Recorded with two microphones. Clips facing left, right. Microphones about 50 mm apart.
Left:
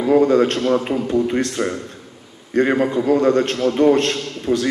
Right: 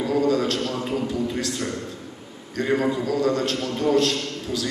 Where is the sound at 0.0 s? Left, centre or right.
Left.